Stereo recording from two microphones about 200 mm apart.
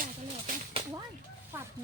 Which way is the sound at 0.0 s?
45° right (ahead or behind).